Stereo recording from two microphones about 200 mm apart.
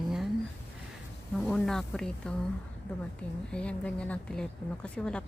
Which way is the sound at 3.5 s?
5° left (ahead or behind).